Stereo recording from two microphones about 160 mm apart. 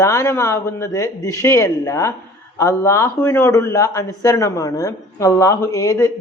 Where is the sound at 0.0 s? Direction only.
20° left (ahead or behind).